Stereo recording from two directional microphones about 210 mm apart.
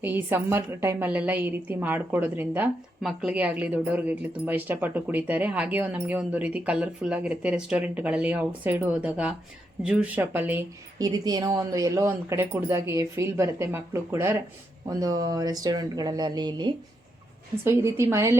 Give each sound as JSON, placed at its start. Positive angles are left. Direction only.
{"t": 0.0, "sound": "a woman's voice", "side_deg": -10}